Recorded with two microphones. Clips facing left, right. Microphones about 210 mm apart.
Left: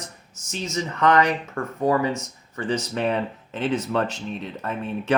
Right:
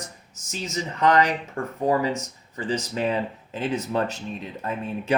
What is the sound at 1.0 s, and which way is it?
Speech, 35° right (ahead or behind).